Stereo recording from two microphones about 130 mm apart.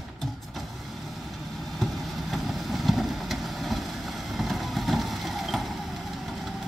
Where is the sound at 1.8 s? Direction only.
Centre (ahead or behind).